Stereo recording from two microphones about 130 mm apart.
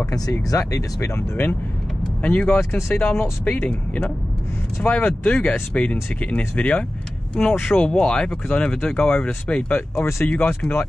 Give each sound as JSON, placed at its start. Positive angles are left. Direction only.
{"t": 0.1, "sound": "speech", "side_deg": 25}